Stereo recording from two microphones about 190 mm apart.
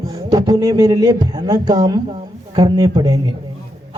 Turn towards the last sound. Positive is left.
turn(degrees=-25)  # may be behind; listen again after turning